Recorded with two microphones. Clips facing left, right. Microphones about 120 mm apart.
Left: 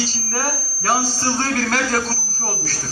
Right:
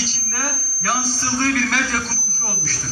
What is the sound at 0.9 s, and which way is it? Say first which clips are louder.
A man's voice: left 3 dB; 45° left (ahead or behind).